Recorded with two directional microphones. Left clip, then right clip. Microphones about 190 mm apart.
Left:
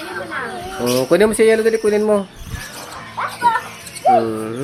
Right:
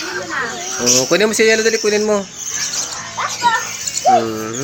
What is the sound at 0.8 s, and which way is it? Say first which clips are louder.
Speech: even; 15° left (ahead or behind).